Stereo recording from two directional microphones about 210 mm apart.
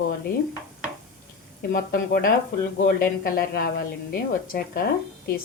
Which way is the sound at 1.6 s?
45° left (ahead or behind).